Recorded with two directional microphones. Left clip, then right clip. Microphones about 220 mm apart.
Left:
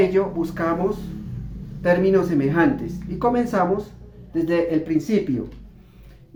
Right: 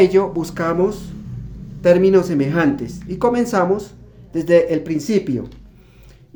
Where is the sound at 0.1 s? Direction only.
55° right (ahead or behind).